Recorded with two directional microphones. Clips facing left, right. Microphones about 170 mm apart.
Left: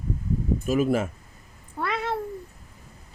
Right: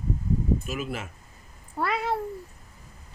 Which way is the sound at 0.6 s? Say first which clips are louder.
Left 10 dB; 40° left (ahead or behind).